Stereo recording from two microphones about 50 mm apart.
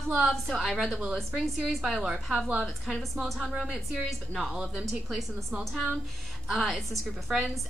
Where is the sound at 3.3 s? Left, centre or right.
Centre.